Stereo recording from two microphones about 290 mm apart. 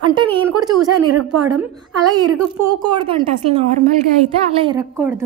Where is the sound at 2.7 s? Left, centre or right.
Centre.